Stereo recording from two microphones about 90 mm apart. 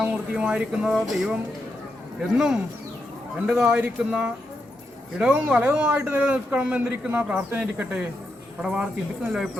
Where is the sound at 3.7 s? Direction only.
15° right (ahead or behind).